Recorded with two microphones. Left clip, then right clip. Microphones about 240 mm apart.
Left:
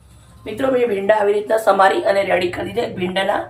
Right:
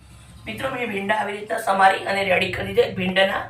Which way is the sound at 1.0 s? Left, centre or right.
Left.